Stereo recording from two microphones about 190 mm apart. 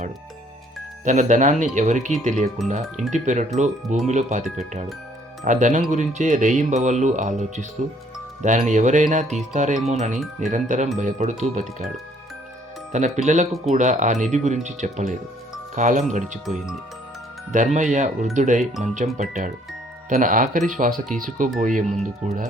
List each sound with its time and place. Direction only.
1.0 s speech: 40° right (ahead or behind)
12.9 s speech: 40° right (ahead or behind)